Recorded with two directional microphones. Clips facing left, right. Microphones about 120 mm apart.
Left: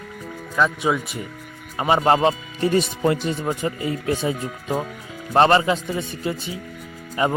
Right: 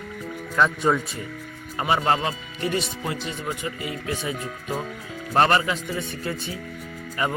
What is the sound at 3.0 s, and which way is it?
Speech, 55° left (ahead or behind).